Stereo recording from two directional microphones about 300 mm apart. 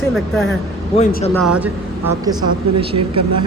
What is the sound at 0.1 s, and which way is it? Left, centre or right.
Speech, centre.